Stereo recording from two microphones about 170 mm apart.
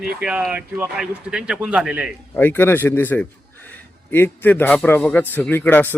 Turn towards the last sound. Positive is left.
turn(degrees=10)  # may be behind; listen again after turning